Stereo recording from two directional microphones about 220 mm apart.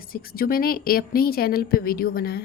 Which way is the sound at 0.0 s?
40° left (ahead or behind).